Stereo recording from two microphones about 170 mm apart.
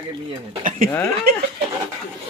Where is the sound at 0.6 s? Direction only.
50° right (ahead or behind).